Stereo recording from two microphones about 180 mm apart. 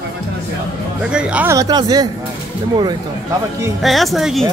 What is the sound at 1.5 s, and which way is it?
Speech, 20° right (ahead or behind).